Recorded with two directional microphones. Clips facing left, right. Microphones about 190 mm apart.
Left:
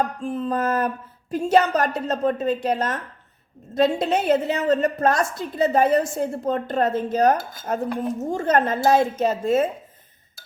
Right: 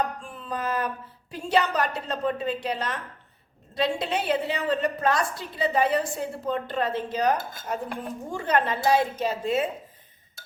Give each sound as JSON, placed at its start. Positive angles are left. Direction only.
{"t": 0.0, "sound": "a woman's voice", "side_deg": 40}